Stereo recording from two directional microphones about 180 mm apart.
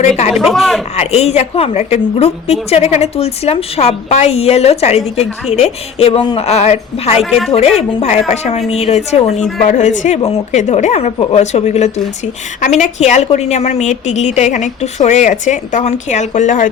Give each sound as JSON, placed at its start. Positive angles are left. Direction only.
{"t": 0.3, "sound": "speech", "side_deg": -5}
{"t": 0.9, "sound": "speech", "side_deg": 35}
{"t": 7.2, "sound": "speech", "side_deg": 0}
{"t": 7.8, "sound": "a woman's voice", "side_deg": 35}